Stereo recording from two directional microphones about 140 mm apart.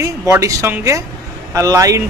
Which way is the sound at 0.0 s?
20° right (ahead or behind).